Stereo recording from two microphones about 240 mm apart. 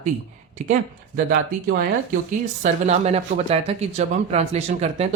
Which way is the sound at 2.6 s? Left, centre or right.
Right.